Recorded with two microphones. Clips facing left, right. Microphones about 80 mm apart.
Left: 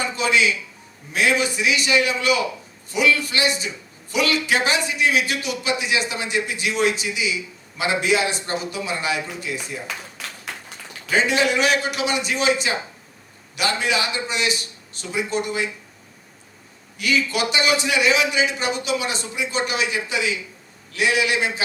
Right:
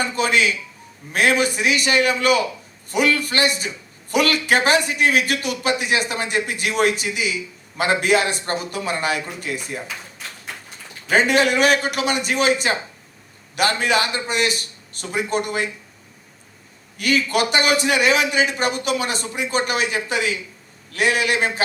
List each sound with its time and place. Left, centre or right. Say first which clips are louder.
0.2 s a man's voice: even; right
9.8 s a sound: left 1 dB; left
11.1 s a man's voice: right 3 dB; right
17.0 s a man's voice: right 2 dB; right